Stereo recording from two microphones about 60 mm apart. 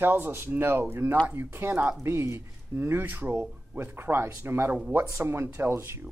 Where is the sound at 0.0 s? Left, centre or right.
Right.